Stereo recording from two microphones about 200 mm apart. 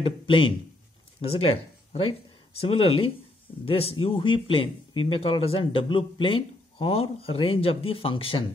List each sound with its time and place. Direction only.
1.2 s speech: 30° left (ahead or behind)